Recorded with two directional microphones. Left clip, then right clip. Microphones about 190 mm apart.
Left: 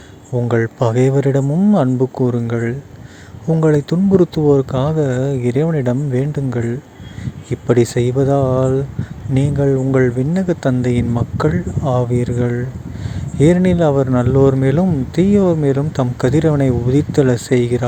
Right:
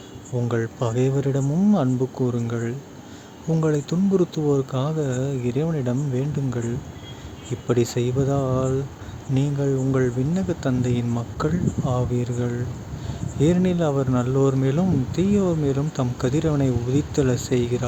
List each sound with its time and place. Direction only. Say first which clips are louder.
0.4 s speech: left 9 dB; 35° left (ahead or behind)